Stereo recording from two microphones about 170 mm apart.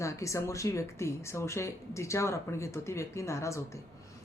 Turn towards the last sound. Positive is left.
turn(degrees=15)  # may be behind; listen again after turning